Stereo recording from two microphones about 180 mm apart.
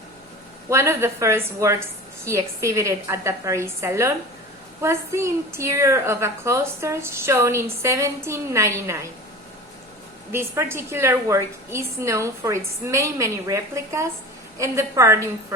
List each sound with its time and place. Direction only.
0.7 s a woman's voice: 15° right (ahead or behind)
10.3 s a woman's voice: 15° right (ahead or behind)